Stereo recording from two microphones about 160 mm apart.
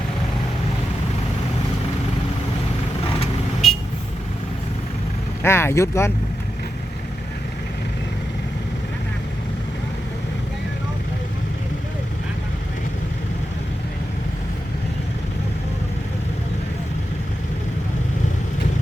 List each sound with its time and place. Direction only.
3.6 s vehicle: centre (ahead or behind)
5.4 s speech: 15° left (ahead or behind)